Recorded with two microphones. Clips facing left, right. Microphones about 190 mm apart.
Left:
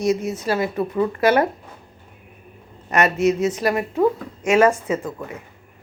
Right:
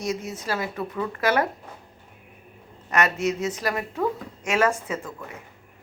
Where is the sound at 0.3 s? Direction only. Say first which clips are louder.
Left 7 dB; 25° left (ahead or behind).